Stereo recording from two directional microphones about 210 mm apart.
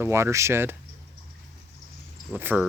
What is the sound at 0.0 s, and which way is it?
Speech, 10° right (ahead or behind).